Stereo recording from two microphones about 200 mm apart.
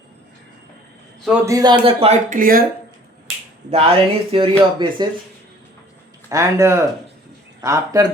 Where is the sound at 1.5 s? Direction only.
20° right (ahead or behind); by 2.7 s 45° right (ahead or behind).